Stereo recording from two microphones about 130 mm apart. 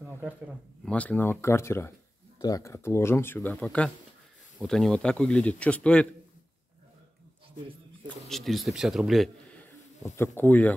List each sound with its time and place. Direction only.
0.8 s speech: 10° left (ahead or behind)
8.3 s speech: centre (ahead or behind)
9.5 s a sound: 15° left (ahead or behind)